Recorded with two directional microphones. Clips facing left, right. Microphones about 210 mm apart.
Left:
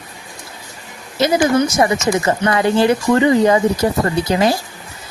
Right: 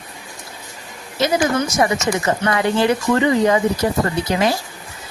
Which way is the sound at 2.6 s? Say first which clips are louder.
Left 4 dB; 35° left (ahead or behind).